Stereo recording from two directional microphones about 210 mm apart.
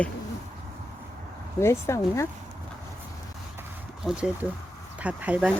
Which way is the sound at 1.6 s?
15° left (ahead or behind).